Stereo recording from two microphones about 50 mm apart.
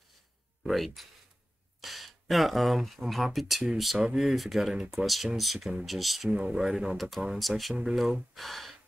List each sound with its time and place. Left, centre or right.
0.7 s speech: centre
6.3 s speech: right
6.6 s speech: centre